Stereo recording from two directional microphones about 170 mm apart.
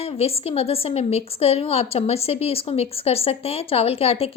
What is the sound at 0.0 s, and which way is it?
A woman's voice, 35° left (ahead or behind).